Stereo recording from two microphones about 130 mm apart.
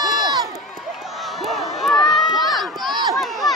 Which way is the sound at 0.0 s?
30° right (ahead or behind).